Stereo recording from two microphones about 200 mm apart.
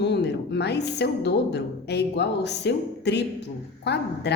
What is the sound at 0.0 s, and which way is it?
A woman's voice, 55° left (ahead or behind).